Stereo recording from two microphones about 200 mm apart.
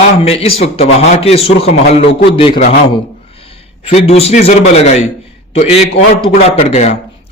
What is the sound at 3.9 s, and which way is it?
A man's voice, 30° left (ahead or behind).